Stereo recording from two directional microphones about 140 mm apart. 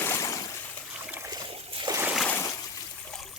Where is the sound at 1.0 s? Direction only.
15° right (ahead or behind).